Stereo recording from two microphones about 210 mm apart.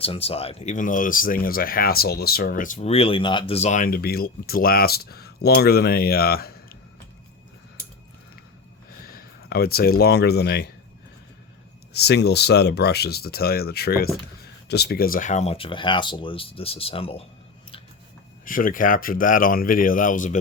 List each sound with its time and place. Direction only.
0.0 s speech: 25° left (ahead or behind); by 6.5 s 45° left (ahead or behind)
9.0 s speech: 45° left (ahead or behind)
11.9 s speech: 50° left (ahead or behind); by 17.2 s 25° left (ahead or behind)
18.4 s speech: 40° left (ahead or behind)